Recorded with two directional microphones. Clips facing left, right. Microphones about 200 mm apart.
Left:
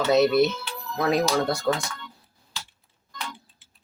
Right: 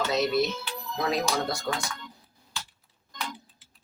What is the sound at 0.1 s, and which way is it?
Speech, 60° left (ahead or behind).